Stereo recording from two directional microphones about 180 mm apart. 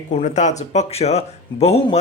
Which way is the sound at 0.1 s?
40° left (ahead or behind).